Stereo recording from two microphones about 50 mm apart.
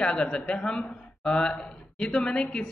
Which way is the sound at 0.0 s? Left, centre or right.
Centre.